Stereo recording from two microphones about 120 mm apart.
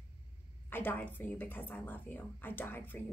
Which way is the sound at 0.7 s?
15° left (ahead or behind).